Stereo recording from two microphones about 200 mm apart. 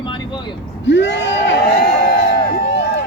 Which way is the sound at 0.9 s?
60° left (ahead or behind).